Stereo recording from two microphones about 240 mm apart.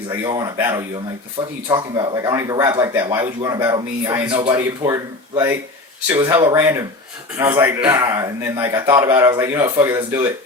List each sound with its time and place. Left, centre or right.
0.1 s a man's voice: centre